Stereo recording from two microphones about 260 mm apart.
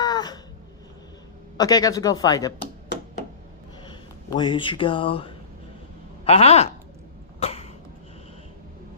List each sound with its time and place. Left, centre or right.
0.0 s a sound: centre
1.5 s speech: centre
4.3 s speech: centre
7.3 s cough: left